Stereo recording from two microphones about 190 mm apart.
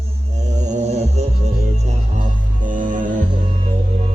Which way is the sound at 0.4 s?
40° right (ahead or behind).